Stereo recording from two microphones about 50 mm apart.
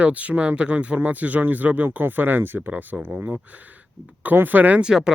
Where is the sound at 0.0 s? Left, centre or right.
Right.